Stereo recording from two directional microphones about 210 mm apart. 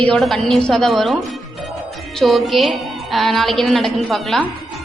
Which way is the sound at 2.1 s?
Centre (ahead or behind).